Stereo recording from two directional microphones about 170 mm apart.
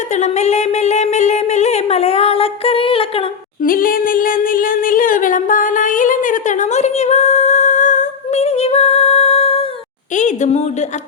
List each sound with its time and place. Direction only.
0.2 s speech: 40° left (ahead or behind)
3.6 s a sound: 55° left (ahead or behind); by 9.6 s 35° left (ahead or behind)
10.2 s speech: 45° left (ahead or behind)